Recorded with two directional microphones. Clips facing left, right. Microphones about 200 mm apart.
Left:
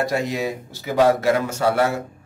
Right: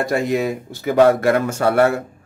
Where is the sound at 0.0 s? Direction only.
55° right (ahead or behind).